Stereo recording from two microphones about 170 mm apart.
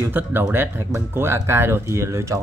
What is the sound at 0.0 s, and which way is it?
Speech, 10° right (ahead or behind).